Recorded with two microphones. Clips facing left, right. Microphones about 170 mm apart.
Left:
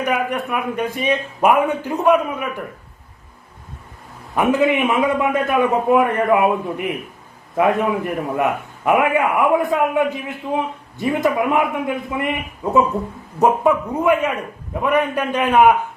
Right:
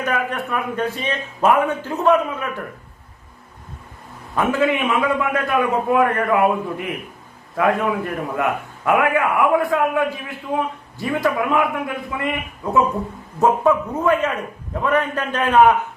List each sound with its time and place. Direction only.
0.0 s a man's voice: 15° left (ahead or behind)
4.4 s a man's voice: 20° left (ahead or behind)
14.0 s a man's voice: 10° left (ahead or behind)